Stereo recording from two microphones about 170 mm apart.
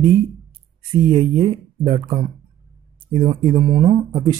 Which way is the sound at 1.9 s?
30° right (ahead or behind).